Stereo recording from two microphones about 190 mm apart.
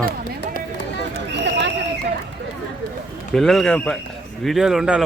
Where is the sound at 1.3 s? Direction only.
65° right (ahead or behind).